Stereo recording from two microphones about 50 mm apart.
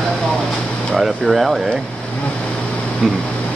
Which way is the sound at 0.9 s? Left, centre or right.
Centre.